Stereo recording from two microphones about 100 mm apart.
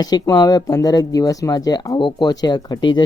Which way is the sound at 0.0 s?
40° left (ahead or behind).